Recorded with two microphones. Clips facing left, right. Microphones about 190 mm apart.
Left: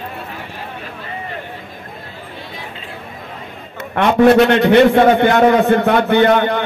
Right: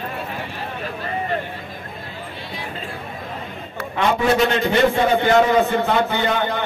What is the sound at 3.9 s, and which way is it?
A man's voice, 60° left (ahead or behind).